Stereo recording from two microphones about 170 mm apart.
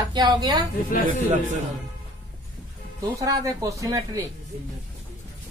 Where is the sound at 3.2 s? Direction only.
20° right (ahead or behind).